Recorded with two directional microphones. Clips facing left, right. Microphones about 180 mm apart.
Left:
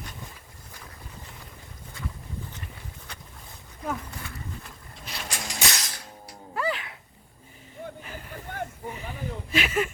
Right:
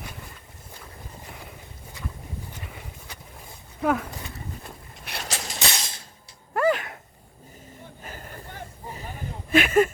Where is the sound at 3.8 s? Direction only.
75° right (ahead or behind).